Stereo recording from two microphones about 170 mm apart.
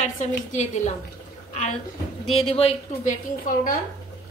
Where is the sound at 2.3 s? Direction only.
35° left (ahead or behind).